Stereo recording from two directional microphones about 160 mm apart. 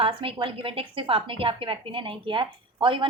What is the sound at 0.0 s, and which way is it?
A woman's voice, 35° right (ahead or behind).